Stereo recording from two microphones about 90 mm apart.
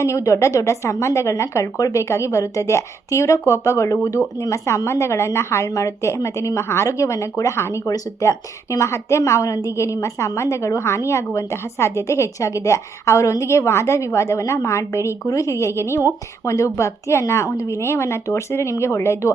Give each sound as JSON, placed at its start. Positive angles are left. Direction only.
{"t": 0.0, "sound": "a woman's voice", "side_deg": 35}